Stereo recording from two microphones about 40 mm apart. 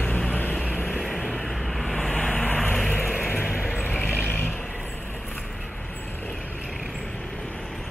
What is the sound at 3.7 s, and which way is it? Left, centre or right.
Vehicle, left.